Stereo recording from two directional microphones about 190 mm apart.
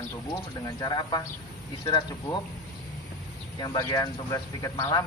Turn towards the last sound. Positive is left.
turn(degrees=20)  # may be behind; listen again after turning